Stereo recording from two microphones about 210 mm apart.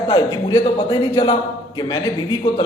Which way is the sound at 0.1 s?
20° left (ahead or behind).